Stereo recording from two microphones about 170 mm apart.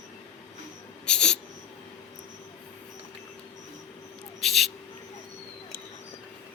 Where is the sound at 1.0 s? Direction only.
5° left (ahead or behind).